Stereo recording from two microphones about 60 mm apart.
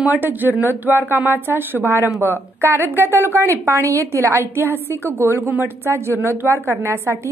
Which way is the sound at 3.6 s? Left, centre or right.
Right.